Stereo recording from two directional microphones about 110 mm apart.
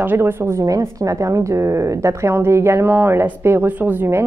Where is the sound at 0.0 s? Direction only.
20° right (ahead or behind).